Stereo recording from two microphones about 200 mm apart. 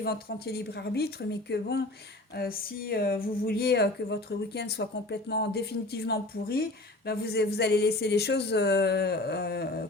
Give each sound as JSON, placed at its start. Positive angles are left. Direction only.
{"t": 0.0, "sound": "speech", "side_deg": 55}